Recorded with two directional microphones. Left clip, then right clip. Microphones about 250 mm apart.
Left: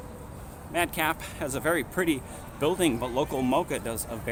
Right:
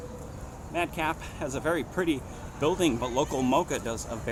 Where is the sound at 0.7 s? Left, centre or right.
Centre.